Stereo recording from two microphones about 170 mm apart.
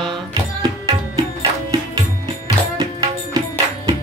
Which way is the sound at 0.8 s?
20° right (ahead or behind).